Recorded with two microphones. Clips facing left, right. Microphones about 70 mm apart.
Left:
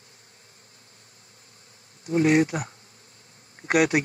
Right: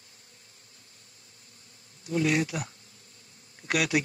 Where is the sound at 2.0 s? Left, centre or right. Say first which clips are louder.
Left 6 dB; left.